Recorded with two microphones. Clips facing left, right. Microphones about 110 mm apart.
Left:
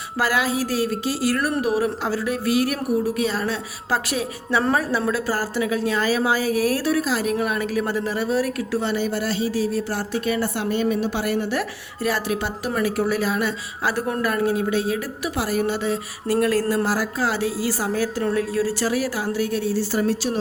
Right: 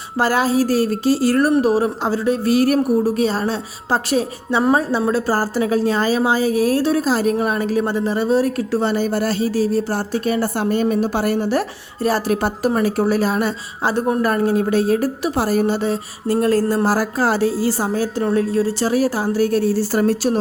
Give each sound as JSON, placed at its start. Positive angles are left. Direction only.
{"t": 0.2, "sound": "a woman's voice", "side_deg": -30}
{"t": 12.3, "sound": "speech", "side_deg": -45}
{"t": 12.7, "sound": "a woman's voice", "side_deg": -30}